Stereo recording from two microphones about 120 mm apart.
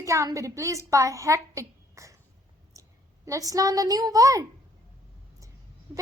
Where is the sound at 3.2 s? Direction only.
25° right (ahead or behind).